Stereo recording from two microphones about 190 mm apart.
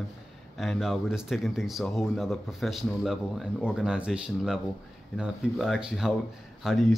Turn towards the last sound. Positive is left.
turn(degrees=0)  # may be behind; listen again after turning